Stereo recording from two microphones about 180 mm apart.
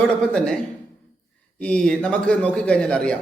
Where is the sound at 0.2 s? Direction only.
5° left (ahead or behind).